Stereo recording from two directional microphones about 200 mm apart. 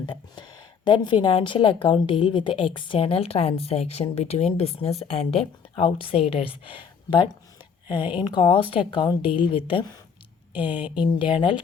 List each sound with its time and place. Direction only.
0.0 s a woman's voice: 20° left (ahead or behind)
10.8 s speech: 5° right (ahead or behind)
11.0 s a woman's voice: 25° left (ahead or behind)